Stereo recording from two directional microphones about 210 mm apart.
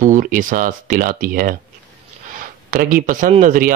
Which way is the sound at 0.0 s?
40° right (ahead or behind).